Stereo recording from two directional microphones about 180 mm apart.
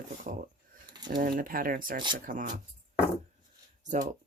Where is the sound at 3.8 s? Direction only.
45° right (ahead or behind).